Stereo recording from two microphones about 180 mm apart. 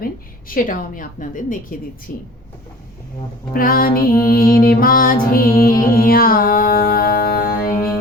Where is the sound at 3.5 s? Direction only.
55° left (ahead or behind).